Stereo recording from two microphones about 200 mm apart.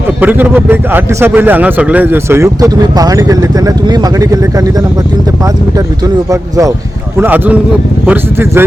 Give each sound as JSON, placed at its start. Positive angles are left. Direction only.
{"t": 0.2, "sound": "speech", "side_deg": -10}
{"t": 6.3, "sound": "speech", "side_deg": -15}